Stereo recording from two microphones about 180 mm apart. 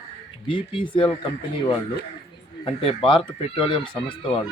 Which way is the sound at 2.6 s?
30° left (ahead or behind).